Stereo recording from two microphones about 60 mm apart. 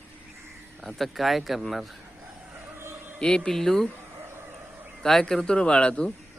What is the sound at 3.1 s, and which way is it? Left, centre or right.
Speech, centre.